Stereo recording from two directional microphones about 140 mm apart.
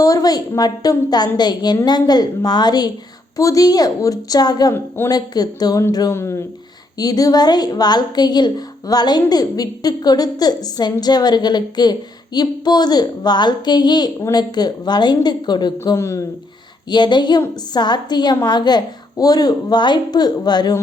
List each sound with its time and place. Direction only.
0.0 s a woman's voice: 25° left (ahead or behind)
4.7 s speech: 15° left (ahead or behind)
5.1 s a woman's voice: 30° left (ahead or behind)
15.8 s a woman's voice: 20° left (ahead or behind)
16.9 s a woman's voice: 30° left (ahead or behind)